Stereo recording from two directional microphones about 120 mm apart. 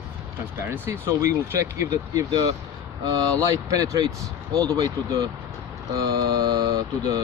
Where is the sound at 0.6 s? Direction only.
20° right (ahead or behind).